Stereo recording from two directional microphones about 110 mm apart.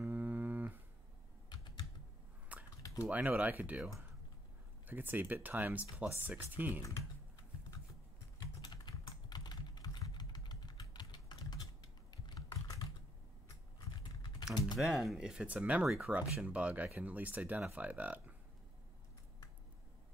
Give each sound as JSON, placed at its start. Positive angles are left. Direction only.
{"t": 0.0, "sound": "a sound", "side_deg": -15}
{"t": 1.5, "sound": "typing", "side_deg": 45}
{"t": 2.5, "sound": "typing", "side_deg": -15}
{"t": 3.1, "sound": "speech", "side_deg": -15}
{"t": 4.8, "sound": "speech", "side_deg": -15}
{"t": 8.4, "sound": "typing", "side_deg": 40}
{"t": 14.2, "sound": "typing", "side_deg": 35}
{"t": 14.8, "sound": "speech", "side_deg": -5}